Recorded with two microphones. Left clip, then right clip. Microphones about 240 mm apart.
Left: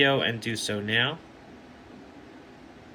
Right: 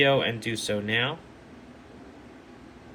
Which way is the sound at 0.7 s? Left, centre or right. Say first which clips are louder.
Left 1 dB; centre.